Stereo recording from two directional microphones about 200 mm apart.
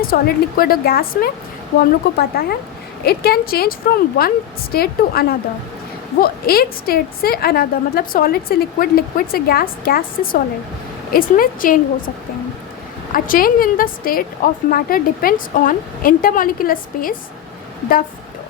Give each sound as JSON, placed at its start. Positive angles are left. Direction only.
{"t": 0.0, "sound": "a woman's voice", "side_deg": 45}
{"t": 11.1, "sound": "a woman's voice", "side_deg": 45}
{"t": 13.1, "sound": "a woman's voice", "side_deg": 45}